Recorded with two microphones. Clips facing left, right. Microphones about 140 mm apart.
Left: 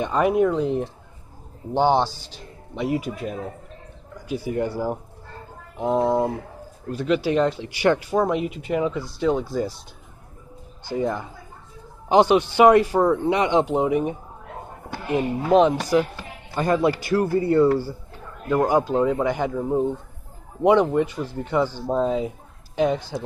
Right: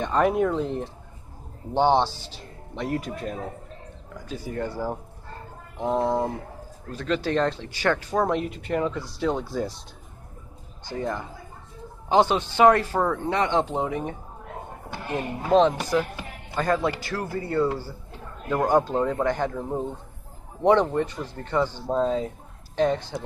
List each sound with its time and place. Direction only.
0.0 s speech: 5° left (ahead or behind)
10.9 s speech: 10° left (ahead or behind)
15.1 s speech: 10° left (ahead or behind)
18.5 s speech: 5° left (ahead or behind)